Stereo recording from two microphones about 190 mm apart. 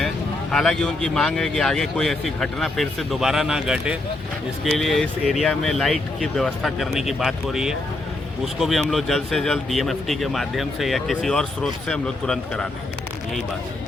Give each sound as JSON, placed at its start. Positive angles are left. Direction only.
{"t": 0.5, "sound": "speech", "side_deg": 0}